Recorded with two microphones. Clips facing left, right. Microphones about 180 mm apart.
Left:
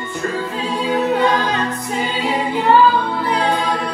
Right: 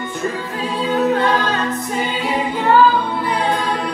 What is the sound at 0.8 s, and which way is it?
Choir, 15° left (ahead or behind).